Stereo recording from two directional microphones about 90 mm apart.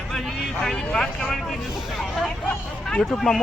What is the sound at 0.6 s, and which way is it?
Speech, 5° left (ahead or behind).